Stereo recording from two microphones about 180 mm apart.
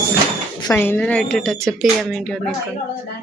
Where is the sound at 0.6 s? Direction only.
10° left (ahead or behind).